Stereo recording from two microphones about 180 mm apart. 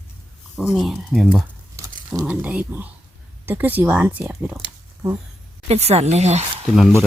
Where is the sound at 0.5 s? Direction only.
Centre (ahead or behind).